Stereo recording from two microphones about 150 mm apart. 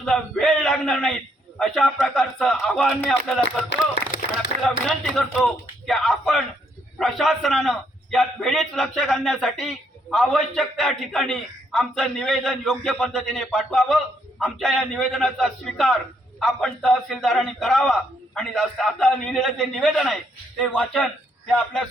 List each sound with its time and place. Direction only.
0.0 s a man's voice: 5° left (ahead or behind)
3.9 s a sound: 60° left (ahead or behind)
4.6 s a man's voice: centre (ahead or behind)